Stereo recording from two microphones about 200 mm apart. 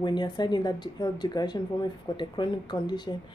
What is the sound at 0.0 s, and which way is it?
Speech, 20° left (ahead or behind).